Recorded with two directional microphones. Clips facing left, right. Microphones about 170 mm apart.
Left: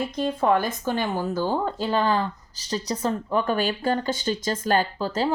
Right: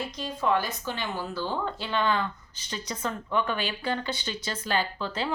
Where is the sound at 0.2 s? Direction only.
55° left (ahead or behind).